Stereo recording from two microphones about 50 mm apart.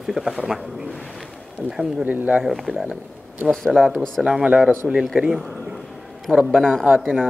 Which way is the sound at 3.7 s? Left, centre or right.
Centre.